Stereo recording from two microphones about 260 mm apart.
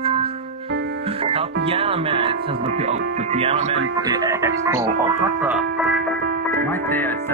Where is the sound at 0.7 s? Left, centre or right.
Right.